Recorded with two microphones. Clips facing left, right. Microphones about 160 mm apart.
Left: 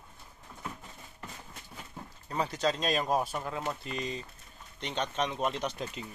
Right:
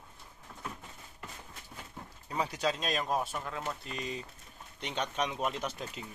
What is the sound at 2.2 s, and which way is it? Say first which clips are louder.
Speech: left 2 dB; 10° right (ahead or behind).